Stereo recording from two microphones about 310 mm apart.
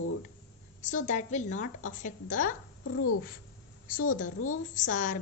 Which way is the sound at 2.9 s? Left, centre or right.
Left.